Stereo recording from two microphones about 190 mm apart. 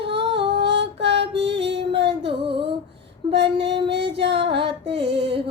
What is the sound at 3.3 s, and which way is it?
Female singing, 60° right (ahead or behind).